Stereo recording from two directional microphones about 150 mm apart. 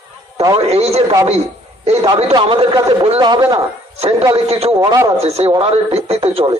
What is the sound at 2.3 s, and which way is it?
Speech, 30° right (ahead or behind).